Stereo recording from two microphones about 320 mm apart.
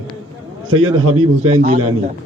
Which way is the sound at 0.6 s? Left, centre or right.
Right.